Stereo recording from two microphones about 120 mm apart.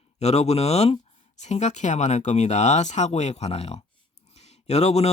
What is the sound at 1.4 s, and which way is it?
Speech, 75° left (ahead or behind).